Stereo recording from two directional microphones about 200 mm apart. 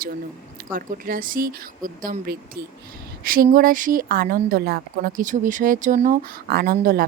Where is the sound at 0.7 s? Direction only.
45° right (ahead or behind).